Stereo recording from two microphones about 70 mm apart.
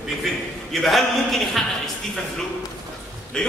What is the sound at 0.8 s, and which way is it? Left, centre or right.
Speech, centre.